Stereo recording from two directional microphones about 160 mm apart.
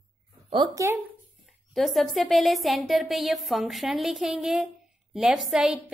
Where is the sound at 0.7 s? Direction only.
15° right (ahead or behind).